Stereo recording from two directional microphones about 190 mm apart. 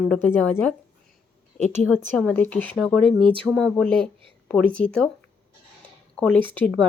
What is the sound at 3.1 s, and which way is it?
Speech, 25° right (ahead or behind).